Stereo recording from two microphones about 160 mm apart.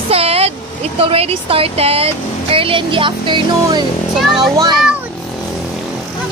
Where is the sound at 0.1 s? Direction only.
40° right (ahead or behind).